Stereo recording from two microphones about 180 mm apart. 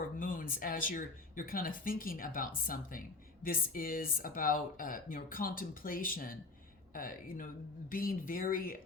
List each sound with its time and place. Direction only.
0.2 s speech: 50° left (ahead or behind)